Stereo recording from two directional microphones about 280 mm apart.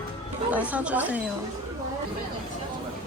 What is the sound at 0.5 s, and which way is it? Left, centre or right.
Speech, centre.